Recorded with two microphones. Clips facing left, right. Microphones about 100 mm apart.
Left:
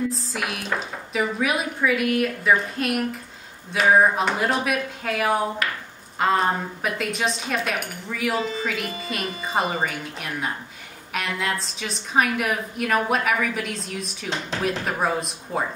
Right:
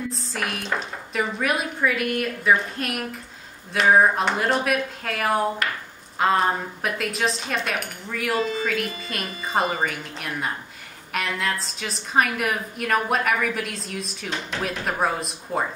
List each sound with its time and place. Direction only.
0.1 s speech: centre (ahead or behind)